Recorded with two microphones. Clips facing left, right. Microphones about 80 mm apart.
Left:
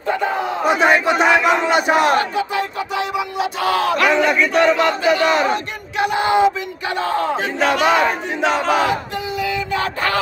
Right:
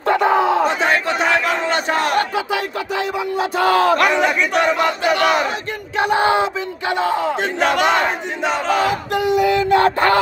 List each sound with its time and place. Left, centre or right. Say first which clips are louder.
0.1 s battle cry: right 5 dB; right
0.7 s battle cry: left 3 dB; centre
3.3 s battle cry: right 4 dB; right
4.1 s a sound: left 1 dB; centre
5.0 s battle cry: right 1 dB; right
5.9 s battle cry: even; right
7.0 s a sound: even; centre
7.6 s battle cry: even; right
8.4 s battle cry: left 1 dB; centre
9.1 s a sound: right 7 dB; right